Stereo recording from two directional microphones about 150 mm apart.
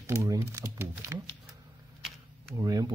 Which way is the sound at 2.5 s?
25° right (ahead or behind).